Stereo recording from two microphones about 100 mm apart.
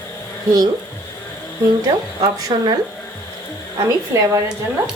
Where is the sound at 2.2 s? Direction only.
40° right (ahead or behind).